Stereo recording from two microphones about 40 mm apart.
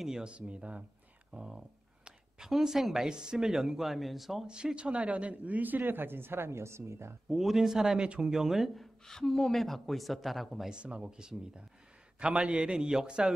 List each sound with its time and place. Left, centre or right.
0.2 s a man's voice: right
1.3 s speech: centre
4.5 s speech: right
7.2 s speech: centre
8.7 s speech: centre
10.7 s a man's voice: right